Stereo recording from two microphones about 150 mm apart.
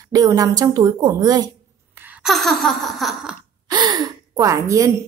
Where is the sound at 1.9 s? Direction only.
15° right (ahead or behind).